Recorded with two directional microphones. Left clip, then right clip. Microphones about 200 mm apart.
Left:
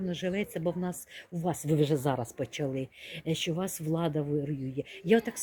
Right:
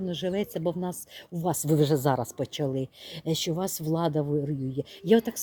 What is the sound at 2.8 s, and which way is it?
Speech, 15° right (ahead or behind).